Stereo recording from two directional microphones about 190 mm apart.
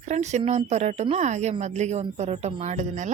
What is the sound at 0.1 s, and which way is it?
A woman's voice, 35° right (ahead or behind).